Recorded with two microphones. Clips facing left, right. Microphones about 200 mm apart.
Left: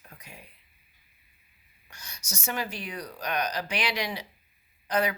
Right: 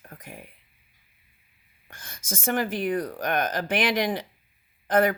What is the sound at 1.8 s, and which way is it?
Speech, 50° right (ahead or behind).